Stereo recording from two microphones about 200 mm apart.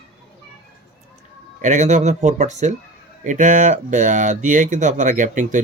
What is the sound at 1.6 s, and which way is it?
Speech, 35° right (ahead or behind).